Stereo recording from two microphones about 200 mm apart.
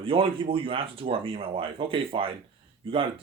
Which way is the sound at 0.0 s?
25° right (ahead or behind).